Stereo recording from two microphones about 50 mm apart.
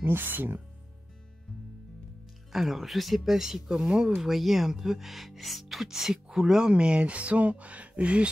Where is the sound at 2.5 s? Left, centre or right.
Centre.